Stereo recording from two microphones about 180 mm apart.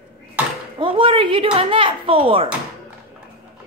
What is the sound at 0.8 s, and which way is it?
Speech, 30° right (ahead or behind).